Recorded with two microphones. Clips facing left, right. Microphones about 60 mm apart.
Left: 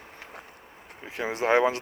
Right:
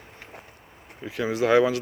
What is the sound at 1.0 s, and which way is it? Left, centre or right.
Speech, left.